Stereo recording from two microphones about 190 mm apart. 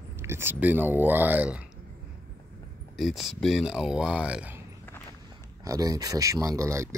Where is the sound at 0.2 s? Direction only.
15° right (ahead or behind).